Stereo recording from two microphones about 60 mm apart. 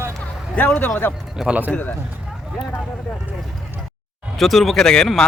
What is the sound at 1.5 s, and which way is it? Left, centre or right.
Speech, right.